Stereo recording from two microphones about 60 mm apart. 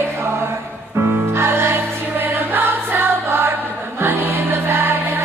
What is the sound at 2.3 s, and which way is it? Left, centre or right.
Music, right.